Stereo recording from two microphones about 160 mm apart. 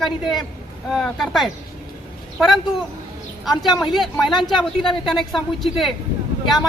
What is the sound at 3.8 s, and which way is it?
Speech, centre (ahead or behind).